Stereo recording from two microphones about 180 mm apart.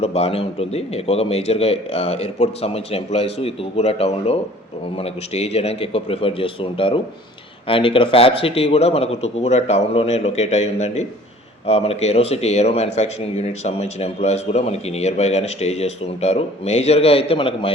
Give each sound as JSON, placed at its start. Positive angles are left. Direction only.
{"t": 0.0, "sound": "a man's voice", "side_deg": 35}